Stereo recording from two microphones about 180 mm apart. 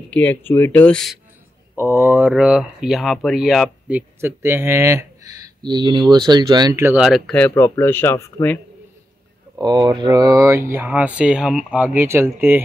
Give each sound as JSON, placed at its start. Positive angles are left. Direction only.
{"t": 0.1, "sound": "speech", "side_deg": 10}
{"t": 1.8, "sound": "speech", "side_deg": -10}
{"t": 4.2, "sound": "speech", "side_deg": -15}
{"t": 9.6, "sound": "speech", "side_deg": -25}